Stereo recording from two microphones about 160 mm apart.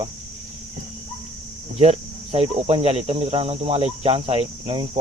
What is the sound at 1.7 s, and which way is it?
Speech, 40° right (ahead or behind).